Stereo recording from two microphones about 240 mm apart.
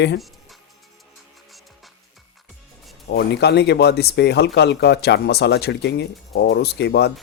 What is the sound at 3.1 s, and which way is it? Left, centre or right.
Speech, left.